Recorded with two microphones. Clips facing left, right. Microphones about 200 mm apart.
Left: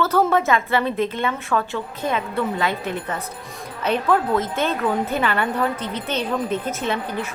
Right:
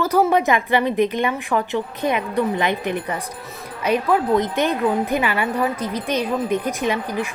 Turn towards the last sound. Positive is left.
turn(degrees=-10)  # may be behind; listen again after turning